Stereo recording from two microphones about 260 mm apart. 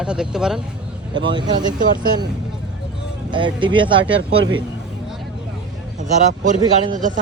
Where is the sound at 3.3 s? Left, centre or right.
Centre.